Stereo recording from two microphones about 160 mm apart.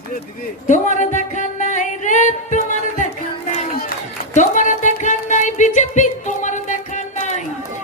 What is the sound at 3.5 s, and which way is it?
Crowd, 60° left (ahead or behind).